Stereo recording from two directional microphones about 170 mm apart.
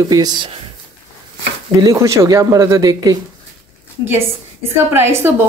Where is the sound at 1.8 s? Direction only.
20° right (ahead or behind).